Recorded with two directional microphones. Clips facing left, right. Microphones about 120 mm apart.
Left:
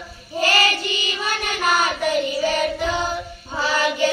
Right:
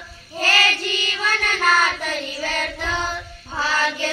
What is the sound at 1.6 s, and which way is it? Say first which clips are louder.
Child singing: left 1 dB; 10° left (ahead or behind).